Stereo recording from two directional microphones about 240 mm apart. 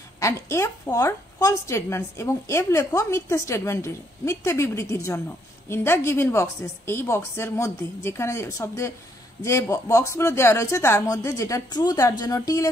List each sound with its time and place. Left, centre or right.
0.2 s a woman's voice: centre